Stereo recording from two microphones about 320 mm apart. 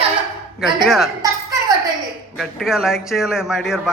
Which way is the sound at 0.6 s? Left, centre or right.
Centre.